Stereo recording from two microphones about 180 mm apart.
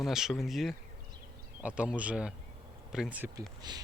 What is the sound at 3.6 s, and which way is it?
Speech, 25° right (ahead or behind).